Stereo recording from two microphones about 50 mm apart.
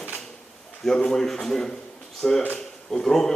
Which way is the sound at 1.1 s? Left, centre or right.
Centre.